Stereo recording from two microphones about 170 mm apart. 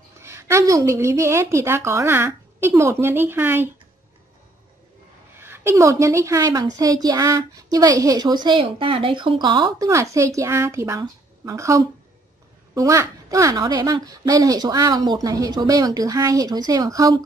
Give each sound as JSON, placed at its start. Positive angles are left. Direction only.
{"t": 0.2, "sound": "a woman's voice", "side_deg": -15}
{"t": 5.4, "sound": "a woman's voice", "side_deg": -15}